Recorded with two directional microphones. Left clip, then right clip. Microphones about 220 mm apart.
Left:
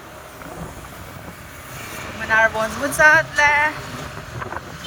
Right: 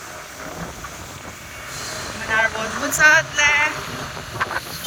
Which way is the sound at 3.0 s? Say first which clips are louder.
Left 1 dB; 20° left (ahead or behind).